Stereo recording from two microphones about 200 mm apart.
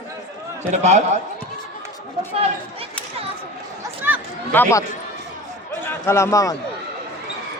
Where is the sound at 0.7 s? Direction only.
35° right (ahead or behind).